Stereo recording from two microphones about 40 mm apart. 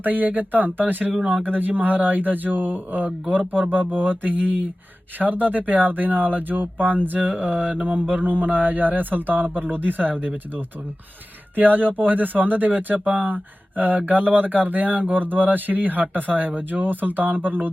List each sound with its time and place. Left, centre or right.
0.0 s speech: right